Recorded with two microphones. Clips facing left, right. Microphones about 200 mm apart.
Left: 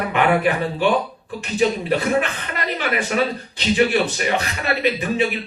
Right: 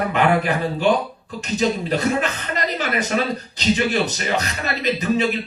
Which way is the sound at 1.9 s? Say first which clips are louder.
Left 1 dB; 40° right (ahead or behind).